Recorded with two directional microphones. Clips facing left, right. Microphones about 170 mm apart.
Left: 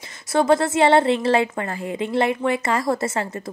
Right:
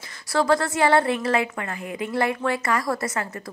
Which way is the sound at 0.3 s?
20° left (ahead or behind).